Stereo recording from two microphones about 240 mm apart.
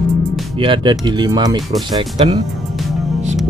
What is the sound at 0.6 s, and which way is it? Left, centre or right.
Speech, right.